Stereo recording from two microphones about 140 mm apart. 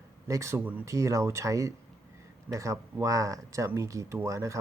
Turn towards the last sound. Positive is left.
turn(degrees=-20)  # may be behind; listen again after turning